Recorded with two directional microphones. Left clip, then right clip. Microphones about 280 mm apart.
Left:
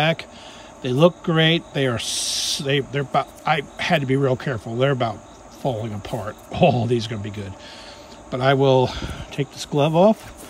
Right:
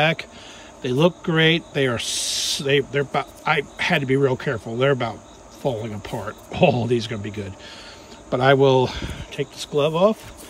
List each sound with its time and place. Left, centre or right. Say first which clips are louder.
0.0 s speech: right 1 dB; centre